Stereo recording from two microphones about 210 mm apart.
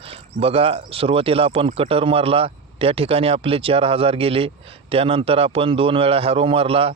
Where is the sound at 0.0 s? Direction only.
25° right (ahead or behind).